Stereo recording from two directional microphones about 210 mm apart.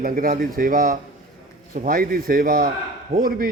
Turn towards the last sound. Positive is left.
turn(degrees=-40)  # may be behind; listen again after turning